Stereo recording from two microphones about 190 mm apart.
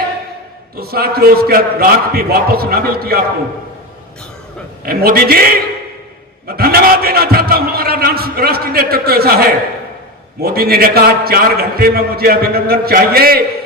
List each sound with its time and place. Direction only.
0.8 s a man's voice: 55° right (ahead or behind)
4.9 s a man's voice: 50° right (ahead or behind)
6.6 s a man's voice: 50° right (ahead or behind)